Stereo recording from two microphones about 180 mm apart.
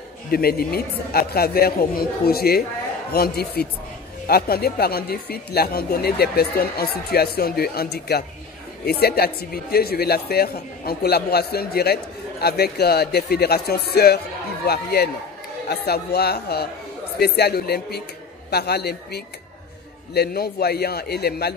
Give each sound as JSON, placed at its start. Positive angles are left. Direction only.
{"t": 0.3, "sound": "speech", "side_deg": 55}